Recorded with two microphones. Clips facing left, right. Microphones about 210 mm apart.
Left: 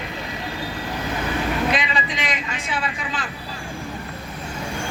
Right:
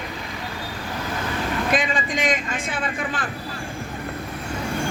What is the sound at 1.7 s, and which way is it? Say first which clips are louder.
A man's voice: right 2 dB; 50° right (ahead or behind).